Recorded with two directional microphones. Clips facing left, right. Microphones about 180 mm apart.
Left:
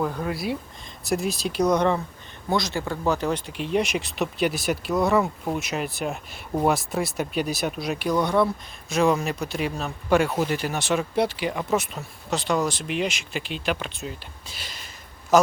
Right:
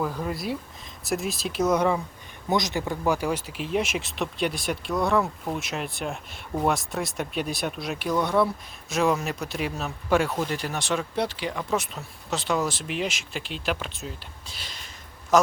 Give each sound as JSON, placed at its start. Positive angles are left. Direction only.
{"t": 0.0, "sound": "speech", "side_deg": 0}
{"t": 2.5, "sound": "a man's voice", "side_deg": -20}